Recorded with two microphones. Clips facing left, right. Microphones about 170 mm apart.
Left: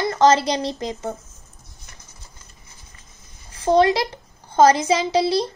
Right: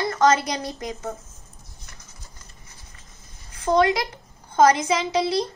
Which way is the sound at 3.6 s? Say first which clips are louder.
Left 3 dB; 30° left (ahead or behind).